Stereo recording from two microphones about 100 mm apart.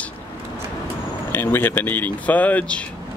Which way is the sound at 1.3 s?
20° left (ahead or behind).